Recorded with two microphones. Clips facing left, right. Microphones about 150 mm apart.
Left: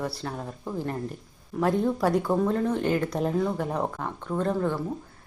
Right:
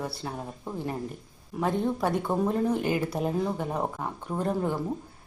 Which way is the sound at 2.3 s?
10° right (ahead or behind).